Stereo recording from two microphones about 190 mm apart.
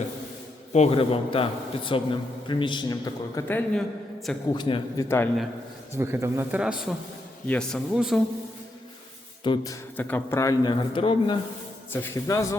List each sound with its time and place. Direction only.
0.7 s a man's voice: 35° left (ahead or behind)
3.4 s a man's voice: 10° left (ahead or behind)
4.5 s a man's voice: 25° left (ahead or behind)
5.0 s a man's voice: 10° left (ahead or behind)
6.0 s a man's voice: 15° right (ahead or behind)
9.4 s a man's voice: 25° left (ahead or behind)
10.0 s a man's voice: 10° left (ahead or behind); by 11.3 s 25° left (ahead or behind)
11.9 s a man's voice: 15° left (ahead or behind)